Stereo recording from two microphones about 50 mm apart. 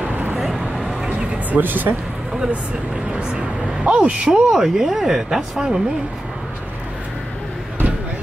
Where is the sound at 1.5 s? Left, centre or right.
Right.